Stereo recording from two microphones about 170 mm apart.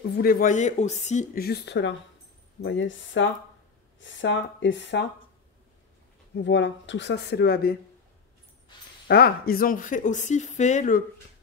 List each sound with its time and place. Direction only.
0.2 s speech: 55° left (ahead or behind)
1.3 s speech: 65° left (ahead or behind); by 5.0 s 90° left
6.3 s speech: 90° left; by 7.7 s 65° left (ahead or behind)
8.7 s speech: 25° left (ahead or behind)
9.0 s speech: 65° left (ahead or behind); by 11.1 s 50° left (ahead or behind)